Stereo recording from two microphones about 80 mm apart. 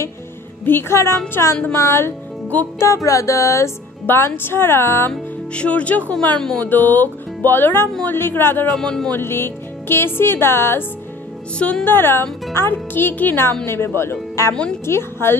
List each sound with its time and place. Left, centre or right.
0.7 s speech: left
4.0 s a woman's voice: left
4.4 s music: left
5.1 s speech: centre
6.6 s music: left
8.7 s speech: centre
9.1 s speech: left
11.5 s speech: centre
11.8 s music: left
13.7 s speech: left
14.5 s speech: centre
14.9 s speech: left